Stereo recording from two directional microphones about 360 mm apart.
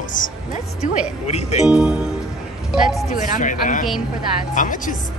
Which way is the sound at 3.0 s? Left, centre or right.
Left.